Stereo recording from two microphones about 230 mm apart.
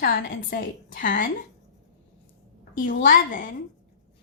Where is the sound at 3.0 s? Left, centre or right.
Left.